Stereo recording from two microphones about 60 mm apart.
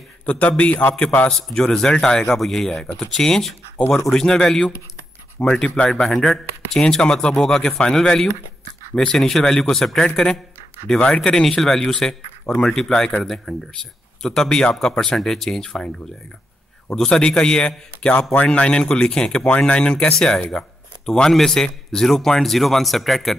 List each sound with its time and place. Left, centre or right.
0.2 s a man's voice: left
1.5 s speech: centre
16.9 s speech: centre